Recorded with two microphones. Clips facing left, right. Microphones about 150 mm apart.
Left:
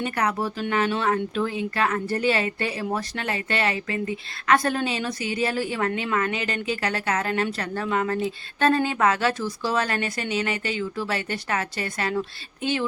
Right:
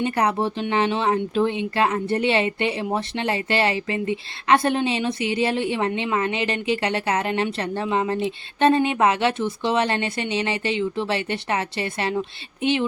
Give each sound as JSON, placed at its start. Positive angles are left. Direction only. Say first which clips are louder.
{"t": 0.0, "sound": "speech", "louder": "right 4 dB", "side_deg": -25}